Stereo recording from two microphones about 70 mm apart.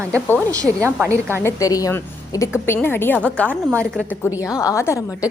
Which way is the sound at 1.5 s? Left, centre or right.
Left.